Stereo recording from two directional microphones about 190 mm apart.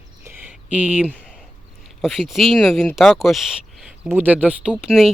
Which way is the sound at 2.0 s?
Centre (ahead or behind).